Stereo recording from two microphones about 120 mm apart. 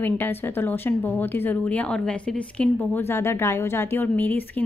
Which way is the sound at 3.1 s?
20° left (ahead or behind).